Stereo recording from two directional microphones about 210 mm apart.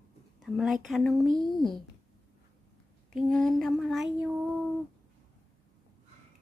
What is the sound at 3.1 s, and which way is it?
Speech, 5° left (ahead or behind).